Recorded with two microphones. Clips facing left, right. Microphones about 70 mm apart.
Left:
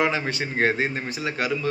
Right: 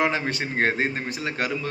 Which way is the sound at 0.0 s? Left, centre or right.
Right.